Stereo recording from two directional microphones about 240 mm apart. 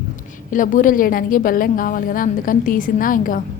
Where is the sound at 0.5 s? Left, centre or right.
Left.